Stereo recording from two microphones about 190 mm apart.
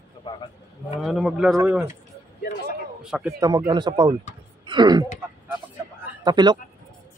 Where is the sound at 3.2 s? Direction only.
15° right (ahead or behind).